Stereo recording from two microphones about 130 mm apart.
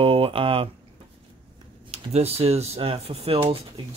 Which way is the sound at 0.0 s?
45° right (ahead or behind).